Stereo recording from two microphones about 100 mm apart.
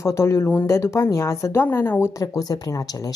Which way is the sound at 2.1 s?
35° left (ahead or behind).